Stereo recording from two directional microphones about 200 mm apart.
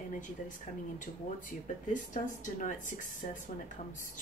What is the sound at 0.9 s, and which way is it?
Speech, 40° left (ahead or behind).